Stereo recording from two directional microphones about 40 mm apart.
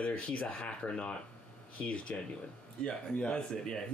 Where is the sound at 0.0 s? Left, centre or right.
Left.